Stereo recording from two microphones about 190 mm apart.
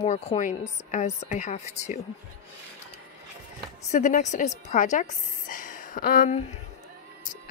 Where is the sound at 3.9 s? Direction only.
40° left (ahead or behind).